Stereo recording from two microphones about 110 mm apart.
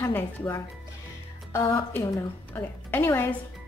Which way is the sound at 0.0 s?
20° left (ahead or behind).